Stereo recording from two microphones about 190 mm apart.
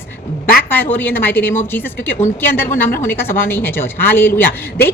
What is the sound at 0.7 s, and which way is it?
A woman's voice, 10° left (ahead or behind).